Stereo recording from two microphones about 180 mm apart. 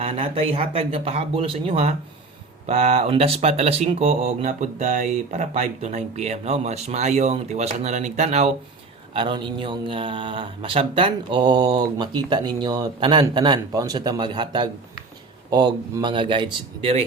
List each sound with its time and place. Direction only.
0.0 s speech: 30° right (ahead or behind)